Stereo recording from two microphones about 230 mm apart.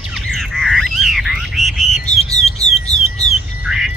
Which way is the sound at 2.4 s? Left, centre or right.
Left.